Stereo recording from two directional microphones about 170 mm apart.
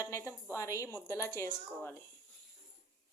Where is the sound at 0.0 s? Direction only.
15° left (ahead or behind).